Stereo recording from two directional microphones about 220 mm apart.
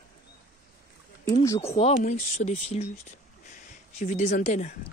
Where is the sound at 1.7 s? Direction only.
30° left (ahead or behind).